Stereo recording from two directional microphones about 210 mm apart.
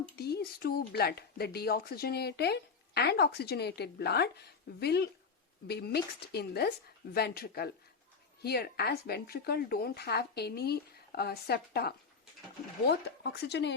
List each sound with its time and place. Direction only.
0.2 s speech: 50° left (ahead or behind)